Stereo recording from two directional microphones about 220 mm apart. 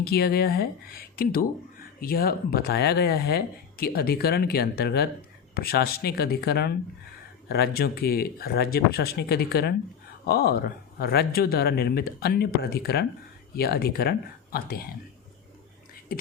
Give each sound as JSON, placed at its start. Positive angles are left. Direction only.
{"t": 0.0, "sound": "speech", "side_deg": 45}